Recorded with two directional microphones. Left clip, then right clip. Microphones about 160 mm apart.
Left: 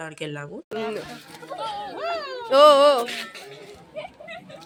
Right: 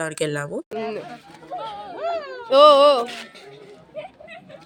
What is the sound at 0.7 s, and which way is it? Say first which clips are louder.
Speech: left 1 dB; centre (ahead or behind).